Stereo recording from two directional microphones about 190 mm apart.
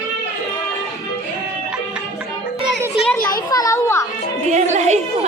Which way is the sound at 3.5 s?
15° left (ahead or behind).